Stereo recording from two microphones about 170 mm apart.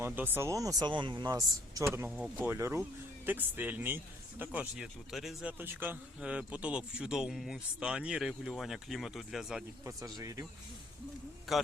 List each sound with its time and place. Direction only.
0.0 s speech: 15° right (ahead or behind)
9.8 s speech: 20° right (ahead or behind)
11.5 s speech: centre (ahead or behind)